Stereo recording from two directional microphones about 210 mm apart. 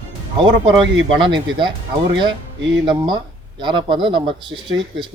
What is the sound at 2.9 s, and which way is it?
Speech, 20° right (ahead or behind).